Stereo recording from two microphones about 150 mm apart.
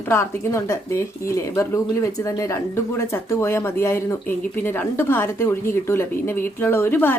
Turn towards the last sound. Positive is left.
turn(degrees=15)  # may be behind; listen again after turning